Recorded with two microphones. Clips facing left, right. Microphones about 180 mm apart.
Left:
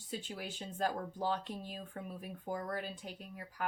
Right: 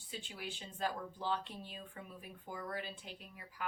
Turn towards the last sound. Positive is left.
turn(degrees=45)  # may be behind; listen again after turning